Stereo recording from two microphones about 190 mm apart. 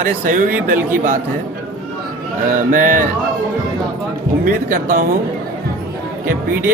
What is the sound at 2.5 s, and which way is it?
Speech, 45° right (ahead or behind).